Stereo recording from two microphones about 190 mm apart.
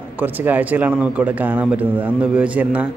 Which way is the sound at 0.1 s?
10° right (ahead or behind).